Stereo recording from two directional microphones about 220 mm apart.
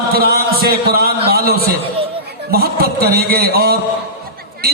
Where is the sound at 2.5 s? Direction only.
45° right (ahead or behind).